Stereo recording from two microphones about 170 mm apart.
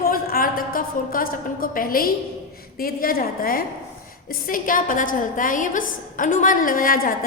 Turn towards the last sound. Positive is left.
turn(degrees=55)  # may be behind; listen again after turning